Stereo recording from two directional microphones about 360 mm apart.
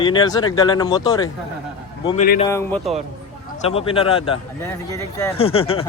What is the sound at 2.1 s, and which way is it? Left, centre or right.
Speech, left.